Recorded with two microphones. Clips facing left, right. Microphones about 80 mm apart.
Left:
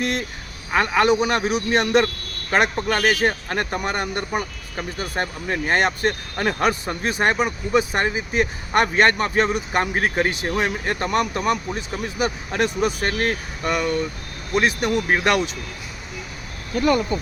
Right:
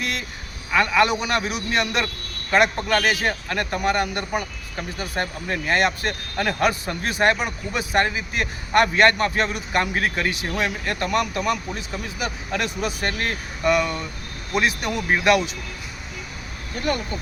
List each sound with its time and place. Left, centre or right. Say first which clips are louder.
0.0 s vehicle: left 4 dB; left
0.7 s speech: left 1 dB; left